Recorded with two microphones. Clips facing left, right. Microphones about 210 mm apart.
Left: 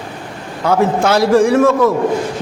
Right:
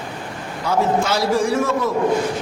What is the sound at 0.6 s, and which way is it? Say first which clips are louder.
A man's voice: left 5 dB; 60° left (ahead or behind).